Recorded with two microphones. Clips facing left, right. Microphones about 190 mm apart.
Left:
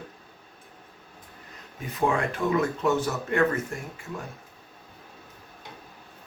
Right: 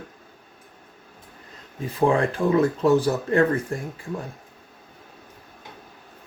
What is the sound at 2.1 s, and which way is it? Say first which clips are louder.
Speech: right 5 dB; 30° right (ahead or behind).